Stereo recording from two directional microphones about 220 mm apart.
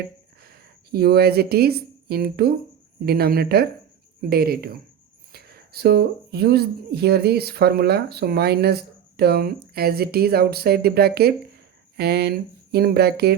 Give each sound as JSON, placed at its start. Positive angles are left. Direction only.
{"t": 0.4, "sound": "speech", "side_deg": -45}